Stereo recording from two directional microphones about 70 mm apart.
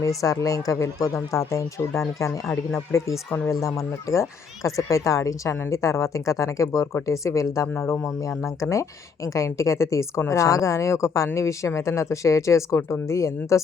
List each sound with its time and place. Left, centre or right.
0.0 s a woman's voice: left